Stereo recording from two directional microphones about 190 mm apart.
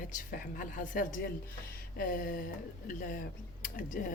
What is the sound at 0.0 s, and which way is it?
A woman's voice, 45° left (ahead or behind).